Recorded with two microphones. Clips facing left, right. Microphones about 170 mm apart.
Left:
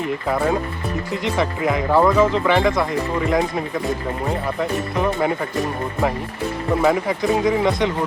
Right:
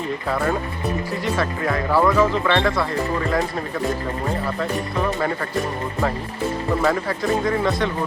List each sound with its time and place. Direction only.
0.0 s speech: 15° left (ahead or behind)
4.9 s speech: 15° left (ahead or behind)
6.8 s speech: 15° left (ahead or behind)